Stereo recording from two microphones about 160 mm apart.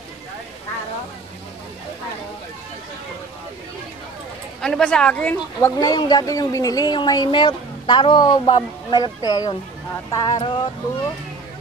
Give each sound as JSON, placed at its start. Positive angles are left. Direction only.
{"t": 4.6, "sound": "speech", "side_deg": 5}
{"t": 5.8, "sound": "speech", "side_deg": 25}